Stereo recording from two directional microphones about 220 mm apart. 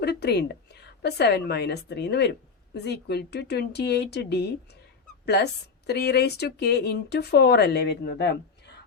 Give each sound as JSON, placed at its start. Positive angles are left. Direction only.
{"t": 0.0, "sound": "a woman's voice", "side_deg": 50}